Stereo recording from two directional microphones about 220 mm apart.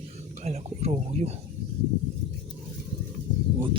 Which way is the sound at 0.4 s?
30° right (ahead or behind).